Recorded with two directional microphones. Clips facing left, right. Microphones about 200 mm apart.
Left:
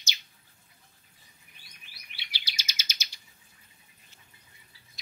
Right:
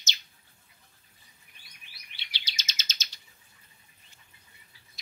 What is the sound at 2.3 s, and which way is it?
Bird, 10° left (ahead or behind).